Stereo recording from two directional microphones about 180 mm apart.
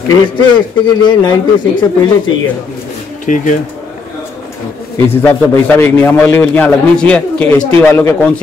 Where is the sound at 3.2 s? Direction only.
45° left (ahead or behind).